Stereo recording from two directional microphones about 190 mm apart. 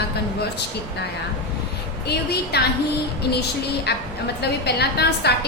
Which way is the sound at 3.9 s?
60° left (ahead or behind).